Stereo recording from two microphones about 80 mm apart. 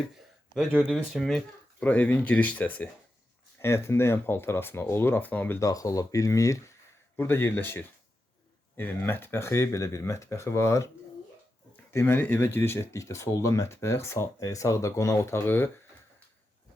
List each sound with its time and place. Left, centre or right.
0.7 s speech: centre
1.1 s speech: centre
1.8 s speech: left
3.6 s speech: left
5.5 s speech: left
7.2 s speech: left
11.9 s speech: left